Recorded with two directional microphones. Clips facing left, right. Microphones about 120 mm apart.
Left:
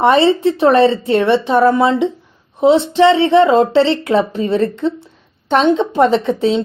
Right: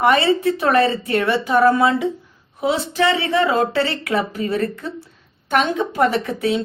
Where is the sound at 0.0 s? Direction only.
25° left (ahead or behind).